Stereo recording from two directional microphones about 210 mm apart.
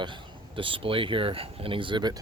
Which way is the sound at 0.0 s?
25° right (ahead or behind).